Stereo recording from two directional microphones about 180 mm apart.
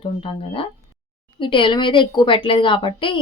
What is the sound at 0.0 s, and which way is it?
A woman's voice, 30° left (ahead or behind).